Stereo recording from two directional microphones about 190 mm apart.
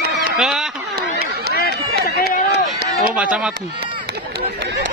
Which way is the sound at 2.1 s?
55° left (ahead or behind).